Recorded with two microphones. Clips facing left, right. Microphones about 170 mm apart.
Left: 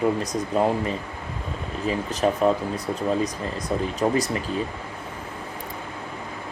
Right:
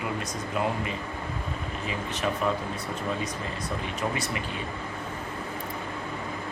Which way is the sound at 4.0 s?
35° left (ahead or behind).